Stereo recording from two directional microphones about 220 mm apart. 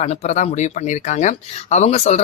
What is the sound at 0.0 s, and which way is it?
Speech, 30° left (ahead or behind).